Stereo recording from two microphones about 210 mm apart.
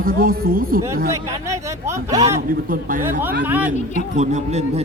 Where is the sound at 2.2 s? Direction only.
40° right (ahead or behind).